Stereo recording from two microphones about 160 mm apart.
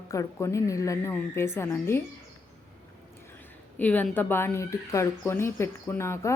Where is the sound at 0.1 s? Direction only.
20° left (ahead or behind).